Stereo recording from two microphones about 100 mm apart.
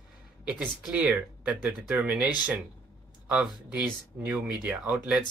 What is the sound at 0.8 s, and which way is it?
Speech, 15° right (ahead or behind).